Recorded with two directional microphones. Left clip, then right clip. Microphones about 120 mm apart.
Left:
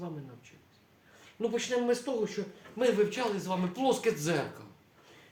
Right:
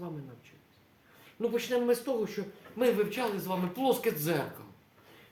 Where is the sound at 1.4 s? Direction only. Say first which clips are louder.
Right 1 dB; 15° right (ahead or behind).